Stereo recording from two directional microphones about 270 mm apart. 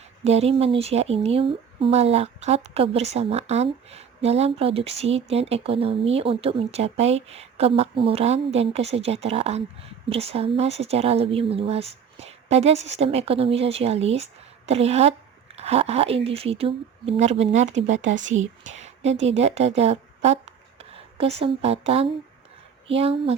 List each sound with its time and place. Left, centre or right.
0.3 s a woman's voice: right